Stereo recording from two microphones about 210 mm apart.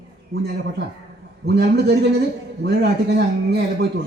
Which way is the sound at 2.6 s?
55° right (ahead or behind).